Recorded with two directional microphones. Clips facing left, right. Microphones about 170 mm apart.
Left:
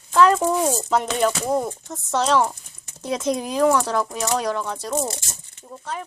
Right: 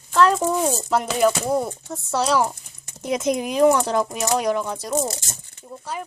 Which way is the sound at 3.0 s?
15° right (ahead or behind).